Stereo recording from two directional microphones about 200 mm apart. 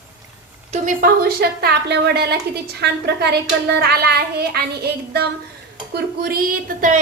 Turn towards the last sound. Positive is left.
turn(degrees=-40)  # may be behind; listen again after turning